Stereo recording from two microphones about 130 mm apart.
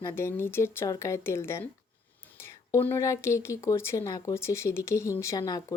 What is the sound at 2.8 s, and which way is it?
Speech, 20° left (ahead or behind).